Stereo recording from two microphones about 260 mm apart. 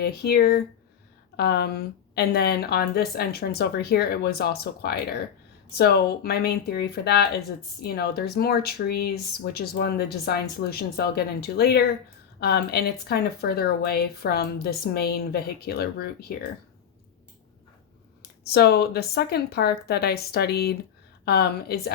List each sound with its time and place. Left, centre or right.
0.0 s speech: left
18.2 s speech: left